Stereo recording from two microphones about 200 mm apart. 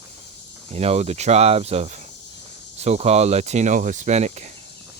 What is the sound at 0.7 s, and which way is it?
Speech, 30° right (ahead or behind).